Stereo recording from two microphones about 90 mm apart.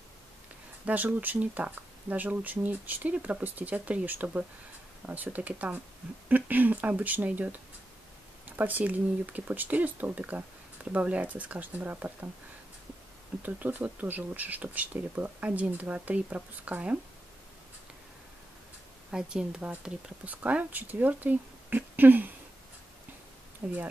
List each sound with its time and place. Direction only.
0.8 s speech: 20° right (ahead or behind)
8.5 s speech: 20° right (ahead or behind)
13.4 s speech: 20° right (ahead or behind)
19.0 s speech: 10° right (ahead or behind)
23.6 s speech: 15° right (ahead or behind)